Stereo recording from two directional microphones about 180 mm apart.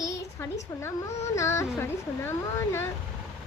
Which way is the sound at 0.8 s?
15° left (ahead or behind).